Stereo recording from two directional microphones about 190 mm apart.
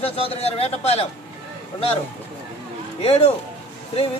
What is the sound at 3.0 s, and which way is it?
Speech, 30° left (ahead or behind).